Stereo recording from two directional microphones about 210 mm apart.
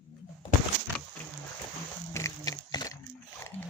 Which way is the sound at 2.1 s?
15° left (ahead or behind).